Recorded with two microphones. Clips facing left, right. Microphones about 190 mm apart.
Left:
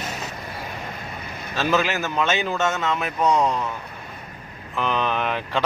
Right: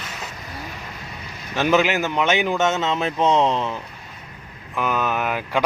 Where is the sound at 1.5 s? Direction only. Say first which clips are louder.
Right 4 dB; 20° right (ahead or behind).